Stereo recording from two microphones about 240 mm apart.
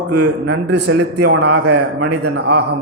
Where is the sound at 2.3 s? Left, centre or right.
Right.